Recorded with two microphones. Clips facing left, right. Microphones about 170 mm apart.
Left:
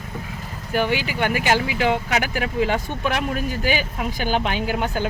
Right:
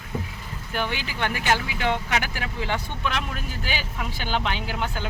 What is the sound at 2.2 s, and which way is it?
Speech, 55° left (ahead or behind).